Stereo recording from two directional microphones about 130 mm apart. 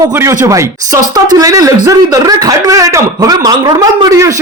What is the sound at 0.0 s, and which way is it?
A man's voice, 20° right (ahead or behind).